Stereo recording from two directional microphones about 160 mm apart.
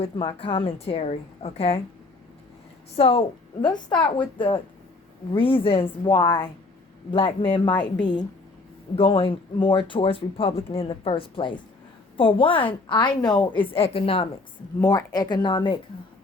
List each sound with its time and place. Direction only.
0.0 s speech: 35° left (ahead or behind)
2.9 s speech: 35° left (ahead or behind)
14.8 s speech: 25° left (ahead or behind)